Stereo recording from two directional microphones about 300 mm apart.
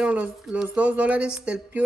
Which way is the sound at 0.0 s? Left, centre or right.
Centre.